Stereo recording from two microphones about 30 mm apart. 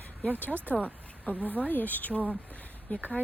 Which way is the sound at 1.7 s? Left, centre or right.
Left.